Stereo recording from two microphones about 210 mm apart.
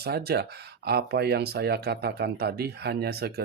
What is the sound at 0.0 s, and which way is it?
Speech, 50° right (ahead or behind).